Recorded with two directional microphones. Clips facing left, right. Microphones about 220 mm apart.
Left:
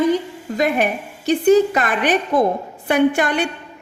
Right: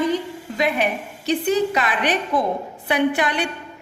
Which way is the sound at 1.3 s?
50° left (ahead or behind).